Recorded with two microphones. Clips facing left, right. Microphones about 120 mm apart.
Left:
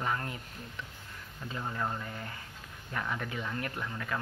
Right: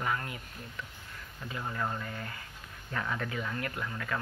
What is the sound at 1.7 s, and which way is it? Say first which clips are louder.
Speech: right 1 dB; 15° left (ahead or behind).